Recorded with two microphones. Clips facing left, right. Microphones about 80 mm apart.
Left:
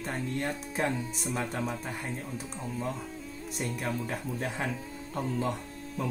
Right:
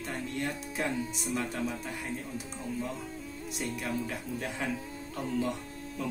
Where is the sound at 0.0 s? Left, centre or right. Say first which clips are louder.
Left 2 dB; left.